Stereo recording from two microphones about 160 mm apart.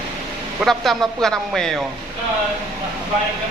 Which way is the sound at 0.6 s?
Centre (ahead or behind).